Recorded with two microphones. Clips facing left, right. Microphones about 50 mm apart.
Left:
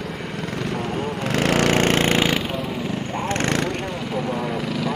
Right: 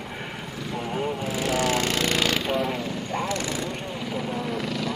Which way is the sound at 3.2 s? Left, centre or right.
Left.